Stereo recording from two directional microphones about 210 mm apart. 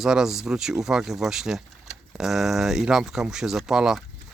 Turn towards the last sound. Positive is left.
turn(degrees=-5)  # may be behind; listen again after turning